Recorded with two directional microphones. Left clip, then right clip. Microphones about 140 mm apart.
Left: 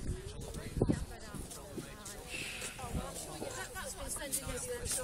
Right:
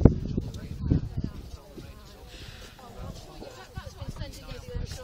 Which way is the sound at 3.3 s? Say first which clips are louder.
Left 3 dB; 25° left (ahead or behind).